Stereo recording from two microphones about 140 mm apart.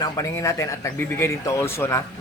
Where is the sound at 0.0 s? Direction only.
25° left (ahead or behind).